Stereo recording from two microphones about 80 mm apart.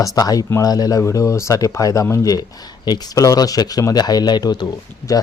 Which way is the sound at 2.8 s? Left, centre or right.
Left.